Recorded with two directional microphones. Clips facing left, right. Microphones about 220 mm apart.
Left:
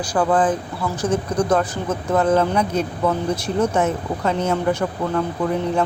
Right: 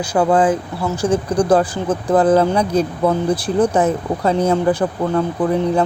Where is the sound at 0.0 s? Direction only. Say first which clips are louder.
Right 3 dB; 25° right (ahead or behind).